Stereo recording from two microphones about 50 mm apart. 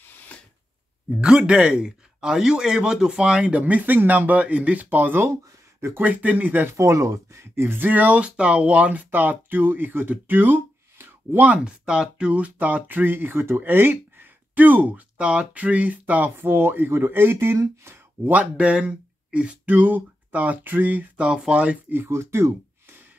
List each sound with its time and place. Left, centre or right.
1.2 s a man's voice: centre; by 5.2 s right
5.2 s speech: right
5.9 s speech: right
6.8 s speech: right
7.5 s speech: right
11.6 s speech: centre; by 14.2 s right
14.5 s speech: right
15.1 s a man's voice: right
16.3 s speech: right
18.2 s speech: right
21.3 s a man's voice: right
21.8 s speech: right
22.1 s speech: right